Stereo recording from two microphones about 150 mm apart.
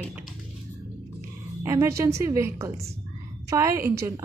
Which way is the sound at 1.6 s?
20° right (ahead or behind).